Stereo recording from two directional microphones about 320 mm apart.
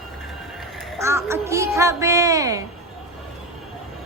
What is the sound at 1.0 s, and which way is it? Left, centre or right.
A woman's voice, centre.